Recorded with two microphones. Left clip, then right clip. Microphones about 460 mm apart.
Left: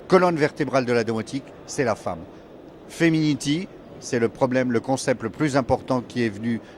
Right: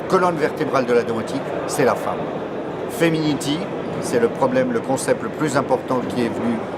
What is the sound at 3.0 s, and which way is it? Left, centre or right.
Speech, left.